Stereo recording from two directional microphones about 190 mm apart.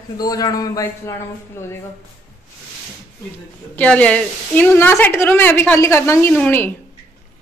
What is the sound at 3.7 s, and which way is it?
A woman's voice, 5° left (ahead or behind).